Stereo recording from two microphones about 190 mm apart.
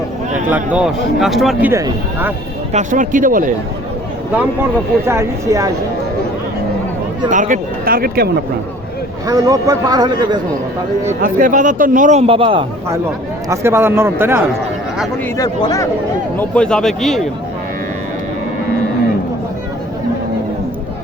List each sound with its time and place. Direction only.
0.5 s speech: 5° right (ahead or behind)
1.7 s a man's voice: 15° right (ahead or behind)
2.7 s speech: 45° right (ahead or behind)
5.0 s a man's voice: 15° right (ahead or behind)
7.3 s speech: 40° right (ahead or behind)
9.2 s a man's voice: 20° right (ahead or behind)
11.2 s a man's voice: 45° right (ahead or behind); by 12.6 s 25° right (ahead or behind)
13.5 s a man's voice: 15° right (ahead or behind)
15.4 s speech: 20° left (ahead or behind)
16.4 s speech: 5° left (ahead or behind)